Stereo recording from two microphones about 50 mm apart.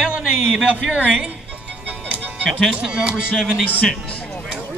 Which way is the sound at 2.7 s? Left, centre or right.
Centre.